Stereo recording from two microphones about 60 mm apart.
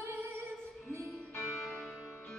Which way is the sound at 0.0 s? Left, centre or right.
Right.